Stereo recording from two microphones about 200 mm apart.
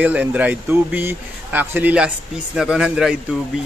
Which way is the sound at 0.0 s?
10° right (ahead or behind).